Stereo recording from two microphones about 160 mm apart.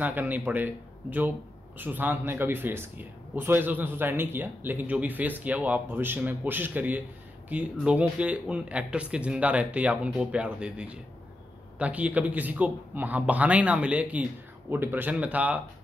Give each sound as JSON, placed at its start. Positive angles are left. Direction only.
{"t": 0.0, "sound": "speech", "side_deg": -10}
{"t": 1.8, "sound": "speech", "side_deg": -10}